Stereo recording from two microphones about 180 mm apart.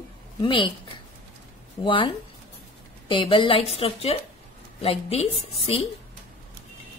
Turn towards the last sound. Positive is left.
turn(degrees=30)  # may be behind; listen again after turning